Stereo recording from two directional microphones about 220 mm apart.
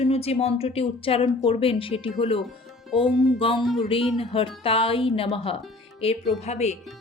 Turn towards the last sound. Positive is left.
turn(degrees=30)  # may be behind; listen again after turning